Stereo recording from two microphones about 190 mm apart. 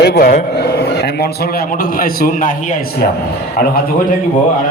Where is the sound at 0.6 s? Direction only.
60° left (ahead or behind).